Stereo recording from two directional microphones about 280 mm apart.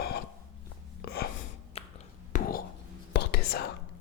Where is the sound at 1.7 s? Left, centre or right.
Left.